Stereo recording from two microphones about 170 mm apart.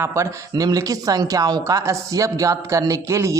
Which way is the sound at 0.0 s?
15° right (ahead or behind).